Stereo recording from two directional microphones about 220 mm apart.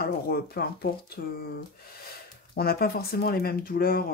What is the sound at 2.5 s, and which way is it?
A woman's voice, 45° left (ahead or behind).